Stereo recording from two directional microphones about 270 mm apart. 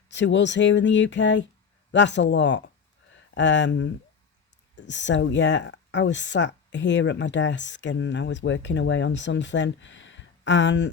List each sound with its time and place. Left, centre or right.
0.1 s speech: left